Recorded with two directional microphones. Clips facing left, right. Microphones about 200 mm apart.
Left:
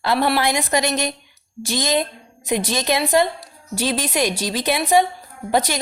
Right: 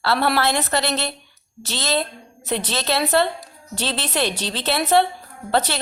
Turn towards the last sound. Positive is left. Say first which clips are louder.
# left 1 dB
turn(degrees=10)  # may be behind; listen again after turning